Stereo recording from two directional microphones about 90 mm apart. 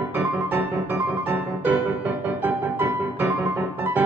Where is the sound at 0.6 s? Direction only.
25° right (ahead or behind).